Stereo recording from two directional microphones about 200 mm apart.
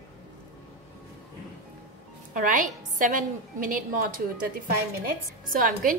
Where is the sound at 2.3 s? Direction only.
40° right (ahead or behind).